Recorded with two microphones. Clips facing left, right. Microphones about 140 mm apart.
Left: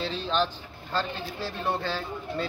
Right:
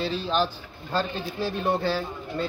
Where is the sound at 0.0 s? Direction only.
5° right (ahead or behind).